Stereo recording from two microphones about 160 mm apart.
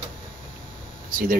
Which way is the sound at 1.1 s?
60° right (ahead or behind).